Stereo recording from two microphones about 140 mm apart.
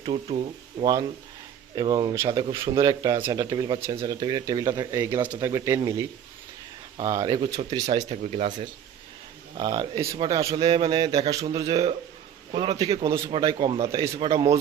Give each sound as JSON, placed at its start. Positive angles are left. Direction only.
{"t": 0.0, "sound": "speech", "side_deg": -40}
{"t": 1.7, "sound": "speech", "side_deg": -30}
{"t": 8.1, "sound": "speech", "side_deg": -50}
{"t": 9.6, "sound": "speech", "side_deg": -30}
{"t": 11.7, "sound": "a man's voice", "side_deg": -45}
{"t": 13.1, "sound": "speech", "side_deg": -25}